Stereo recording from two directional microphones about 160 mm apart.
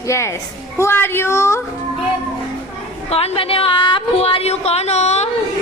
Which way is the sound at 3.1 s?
40° left (ahead or behind).